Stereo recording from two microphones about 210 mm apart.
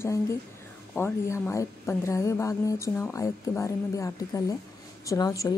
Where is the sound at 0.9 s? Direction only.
10° left (ahead or behind).